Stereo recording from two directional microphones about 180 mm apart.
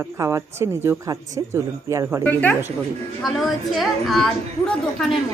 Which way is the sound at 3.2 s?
Centre (ahead or behind).